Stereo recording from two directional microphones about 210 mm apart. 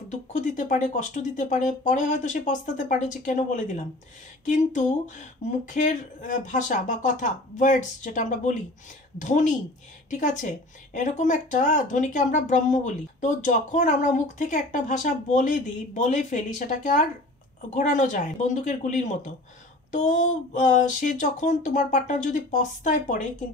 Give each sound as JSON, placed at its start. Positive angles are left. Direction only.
{"t": 0.1, "sound": "speech", "side_deg": 35}